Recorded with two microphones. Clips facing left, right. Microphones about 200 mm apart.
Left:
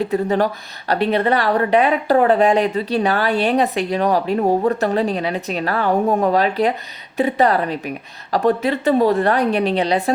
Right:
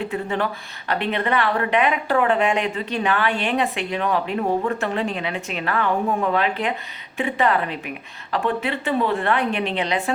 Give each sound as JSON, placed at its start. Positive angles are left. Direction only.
{"t": 0.0, "sound": "speech", "side_deg": 40}